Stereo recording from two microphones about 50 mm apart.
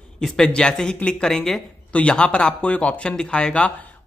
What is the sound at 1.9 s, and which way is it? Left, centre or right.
A man's voice, left.